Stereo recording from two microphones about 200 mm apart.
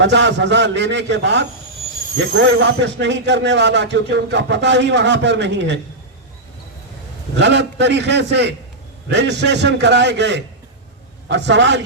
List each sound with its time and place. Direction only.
0.0 s speech: 60° right (ahead or behind)
7.3 s speech: 60° right (ahead or behind)